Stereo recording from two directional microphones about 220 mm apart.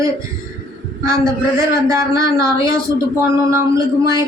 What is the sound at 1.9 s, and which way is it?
Speech, 15° right (ahead or behind).